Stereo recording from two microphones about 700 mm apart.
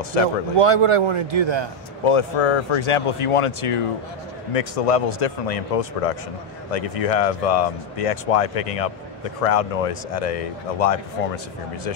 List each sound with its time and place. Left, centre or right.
0.6 s a man's voice: right
2.0 s speech: left